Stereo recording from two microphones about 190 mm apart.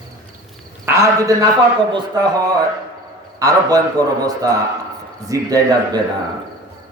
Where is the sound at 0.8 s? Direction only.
15° right (ahead or behind).